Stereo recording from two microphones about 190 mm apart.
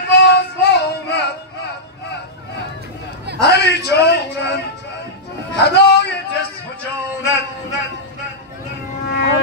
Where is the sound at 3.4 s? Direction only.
60° left (ahead or behind).